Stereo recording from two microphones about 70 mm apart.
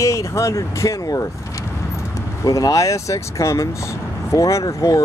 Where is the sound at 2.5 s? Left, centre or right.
Left.